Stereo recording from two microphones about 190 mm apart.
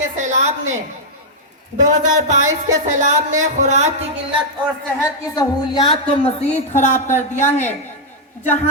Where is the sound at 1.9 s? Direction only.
40° right (ahead or behind).